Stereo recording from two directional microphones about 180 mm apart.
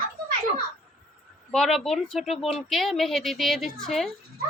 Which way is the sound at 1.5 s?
5° left (ahead or behind).